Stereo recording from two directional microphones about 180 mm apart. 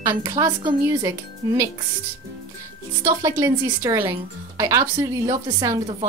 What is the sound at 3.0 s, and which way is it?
A woman's voice, 15° right (ahead or behind).